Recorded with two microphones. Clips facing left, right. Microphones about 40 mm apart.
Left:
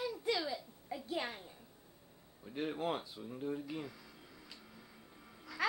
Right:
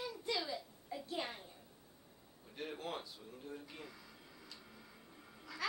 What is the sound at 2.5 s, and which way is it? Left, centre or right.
Speech, left.